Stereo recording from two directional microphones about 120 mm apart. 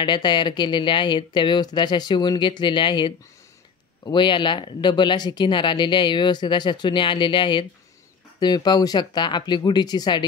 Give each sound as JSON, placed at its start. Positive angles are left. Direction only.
{"t": 0.0, "sound": "speech", "side_deg": 40}